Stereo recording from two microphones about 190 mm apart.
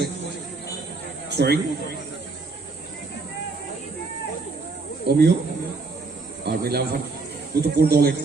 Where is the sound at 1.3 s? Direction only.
55° right (ahead or behind).